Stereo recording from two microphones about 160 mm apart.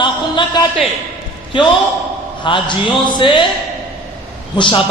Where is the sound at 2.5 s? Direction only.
30° left (ahead or behind).